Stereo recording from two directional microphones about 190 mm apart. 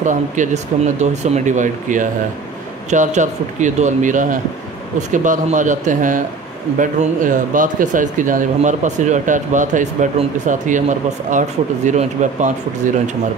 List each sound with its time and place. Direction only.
0.0 s a man's voice: 40° right (ahead or behind)